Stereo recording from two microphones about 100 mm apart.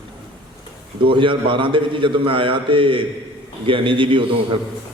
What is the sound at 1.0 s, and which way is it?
A man's voice, 60° right (ahead or behind).